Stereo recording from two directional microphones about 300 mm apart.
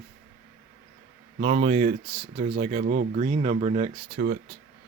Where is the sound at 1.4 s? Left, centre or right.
Right.